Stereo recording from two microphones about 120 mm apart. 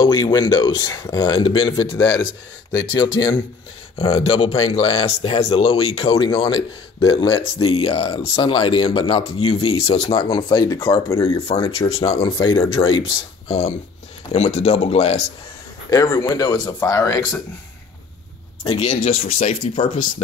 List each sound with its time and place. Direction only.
0.0 s speech: 35° left (ahead or behind)
14.3 s speech: 65° left (ahead or behind)
15.9 s speech: 35° left (ahead or behind)
18.7 s speech: 60° left (ahead or behind)